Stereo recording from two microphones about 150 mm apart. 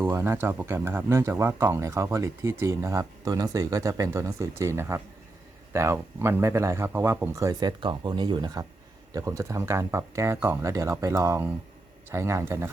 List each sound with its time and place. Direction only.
0.0 s speech: 15° right (ahead or behind)
7.8 s speech: 30° right (ahead or behind)